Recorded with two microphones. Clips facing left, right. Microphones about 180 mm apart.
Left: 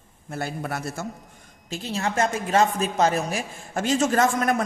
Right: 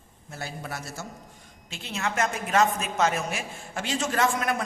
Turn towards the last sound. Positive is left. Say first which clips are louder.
# left 5 dB
turn(degrees=45)  # may be behind; listen again after turning